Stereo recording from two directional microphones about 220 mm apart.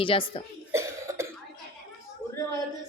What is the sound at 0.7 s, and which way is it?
Cough, 10° right (ahead or behind).